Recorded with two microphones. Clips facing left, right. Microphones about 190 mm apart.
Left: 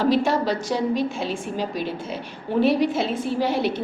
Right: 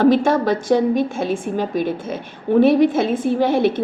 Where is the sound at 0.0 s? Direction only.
50° right (ahead or behind).